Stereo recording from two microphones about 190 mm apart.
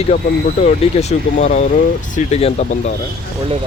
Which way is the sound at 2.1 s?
35° left (ahead or behind).